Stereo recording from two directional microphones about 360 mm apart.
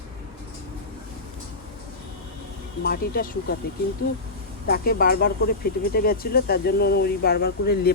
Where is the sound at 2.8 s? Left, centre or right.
Left.